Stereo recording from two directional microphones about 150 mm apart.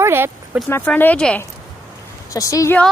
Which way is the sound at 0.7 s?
15° left (ahead or behind).